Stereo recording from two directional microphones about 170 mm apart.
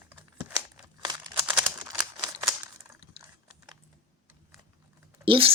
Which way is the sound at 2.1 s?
20° right (ahead or behind).